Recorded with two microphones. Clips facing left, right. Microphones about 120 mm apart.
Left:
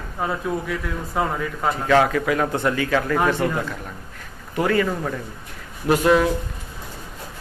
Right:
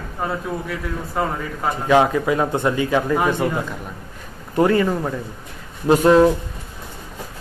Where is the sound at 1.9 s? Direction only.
20° right (ahead or behind).